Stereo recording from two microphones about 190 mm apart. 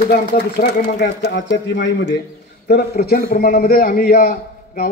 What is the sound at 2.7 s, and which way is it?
A man's voice, 55° left (ahead or behind).